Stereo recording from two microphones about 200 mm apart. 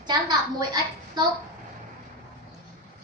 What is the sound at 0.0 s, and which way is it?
A child's voice, 20° right (ahead or behind).